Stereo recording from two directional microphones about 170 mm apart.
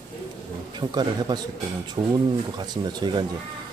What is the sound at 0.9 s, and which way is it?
Speech, 25° right (ahead or behind).